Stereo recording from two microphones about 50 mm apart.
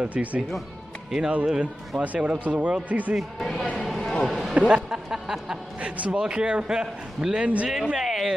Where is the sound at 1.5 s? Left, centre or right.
Centre.